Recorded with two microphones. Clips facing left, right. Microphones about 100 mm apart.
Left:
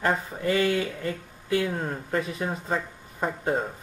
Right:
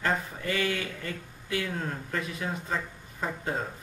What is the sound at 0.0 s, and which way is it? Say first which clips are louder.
Speech: left 4 dB; 25° left (ahead or behind).